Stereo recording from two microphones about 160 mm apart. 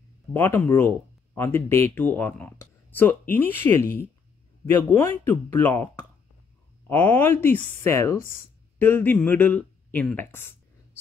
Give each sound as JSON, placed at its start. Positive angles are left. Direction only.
{"t": 0.3, "sound": "speech", "side_deg": 10}
{"t": 6.9, "sound": "speech", "side_deg": 10}